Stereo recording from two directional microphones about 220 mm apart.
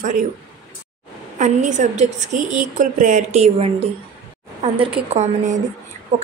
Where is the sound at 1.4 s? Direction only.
35° right (ahead or behind).